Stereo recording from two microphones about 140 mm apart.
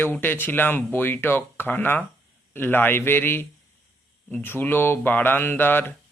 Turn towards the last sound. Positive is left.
turn(degrees=15)  # may be behind; listen again after turning